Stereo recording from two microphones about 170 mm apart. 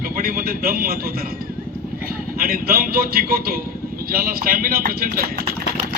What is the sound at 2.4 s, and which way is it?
A man's voice, 60° right (ahead or behind).